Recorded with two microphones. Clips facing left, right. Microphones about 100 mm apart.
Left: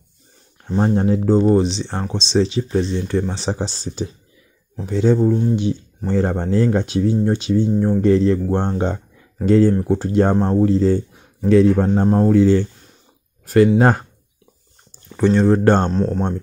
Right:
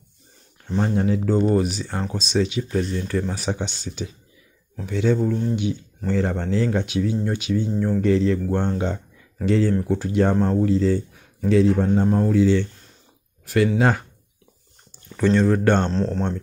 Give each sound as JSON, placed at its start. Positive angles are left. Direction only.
{"t": 0.7, "sound": "speech", "side_deg": 35}
{"t": 11.4, "sound": "speech", "side_deg": 55}
{"t": 12.1, "sound": "speech", "side_deg": 35}
{"t": 13.7, "sound": "speech", "side_deg": 40}
{"t": 15.1, "sound": "speech", "side_deg": 25}
{"t": 15.9, "sound": "speech", "side_deg": 10}